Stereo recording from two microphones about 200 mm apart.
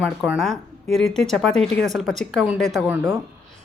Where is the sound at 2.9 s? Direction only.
15° right (ahead or behind).